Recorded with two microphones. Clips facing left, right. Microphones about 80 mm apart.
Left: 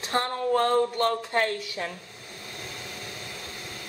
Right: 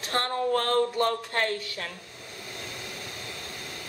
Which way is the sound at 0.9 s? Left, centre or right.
Centre.